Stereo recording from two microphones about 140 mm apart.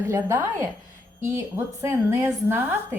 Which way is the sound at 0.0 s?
20° right (ahead or behind).